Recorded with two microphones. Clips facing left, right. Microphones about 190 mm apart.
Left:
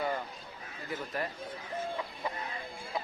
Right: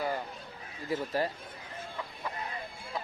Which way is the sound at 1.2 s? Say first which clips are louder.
Right 4 dB; 30° right (ahead or behind).